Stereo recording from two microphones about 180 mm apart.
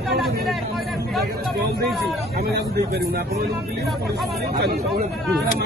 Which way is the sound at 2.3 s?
60° right (ahead or behind).